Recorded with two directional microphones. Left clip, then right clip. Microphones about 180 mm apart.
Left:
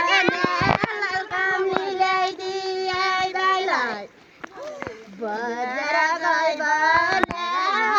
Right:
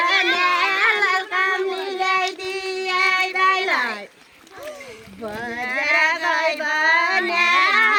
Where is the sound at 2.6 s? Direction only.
35° right (ahead or behind).